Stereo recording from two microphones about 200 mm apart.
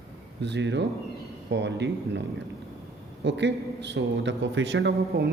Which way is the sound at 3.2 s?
60° right (ahead or behind).